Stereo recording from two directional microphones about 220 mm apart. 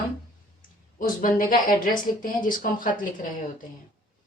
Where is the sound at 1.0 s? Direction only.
40° left (ahead or behind).